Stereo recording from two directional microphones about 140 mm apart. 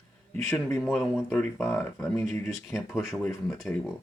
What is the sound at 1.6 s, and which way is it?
Speech, 15° left (ahead or behind).